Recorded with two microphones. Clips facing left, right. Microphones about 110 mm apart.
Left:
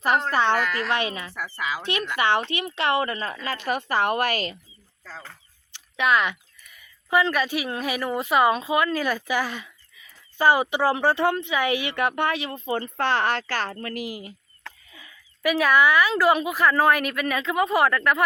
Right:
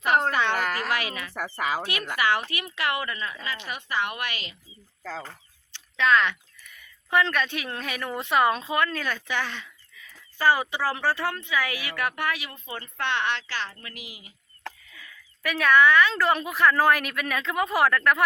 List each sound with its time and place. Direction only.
0.3 s a woman's voice: 35° left (ahead or behind)
0.6 s a woman's voice: 40° right (ahead or behind)
0.9 s speech: 25° left (ahead or behind)
1.5 s speech: 50° right (ahead or behind)
2.1 s a woman's voice: 25° left (ahead or behind); by 4.5 s 40° left (ahead or behind)
5.7 s speech: 15° left (ahead or behind); by 14.3 s 45° left (ahead or behind)
14.9 s a sound: 20° left (ahead or behind)
15.4 s a woman's voice: 10° left (ahead or behind)